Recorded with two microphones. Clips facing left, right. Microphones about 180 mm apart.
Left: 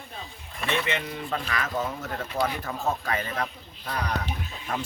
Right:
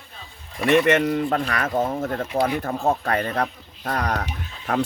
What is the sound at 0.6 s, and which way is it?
Speech, 80° right.